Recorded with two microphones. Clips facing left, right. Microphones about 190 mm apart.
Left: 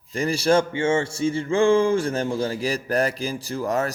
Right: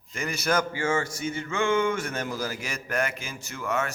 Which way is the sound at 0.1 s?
30° left (ahead or behind).